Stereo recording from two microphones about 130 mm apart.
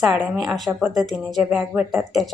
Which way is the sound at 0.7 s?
15° right (ahead or behind).